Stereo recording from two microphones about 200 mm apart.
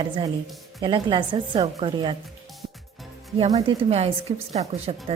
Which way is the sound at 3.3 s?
30° right (ahead or behind).